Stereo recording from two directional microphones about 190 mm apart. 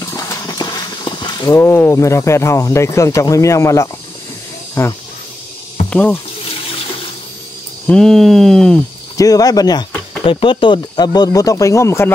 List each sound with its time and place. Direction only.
0.0 s horse: 15° left (ahead or behind)
1.6 s speech: 10° left (ahead or behind)
7.8 s speech: 5° left (ahead or behind)
9.1 s speech: 20° left (ahead or behind)